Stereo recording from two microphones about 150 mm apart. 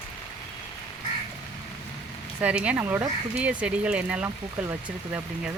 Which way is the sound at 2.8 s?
20° right (ahead or behind).